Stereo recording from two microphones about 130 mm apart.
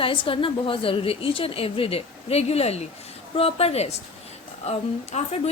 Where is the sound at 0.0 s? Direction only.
40° left (ahead or behind).